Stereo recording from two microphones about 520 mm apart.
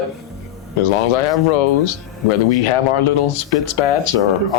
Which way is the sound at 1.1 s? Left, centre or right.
Left.